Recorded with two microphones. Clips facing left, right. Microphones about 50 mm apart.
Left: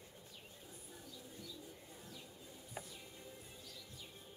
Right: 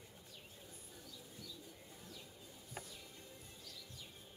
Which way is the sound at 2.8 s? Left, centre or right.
Centre.